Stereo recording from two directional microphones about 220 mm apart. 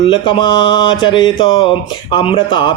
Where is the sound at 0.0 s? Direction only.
20° left (ahead or behind).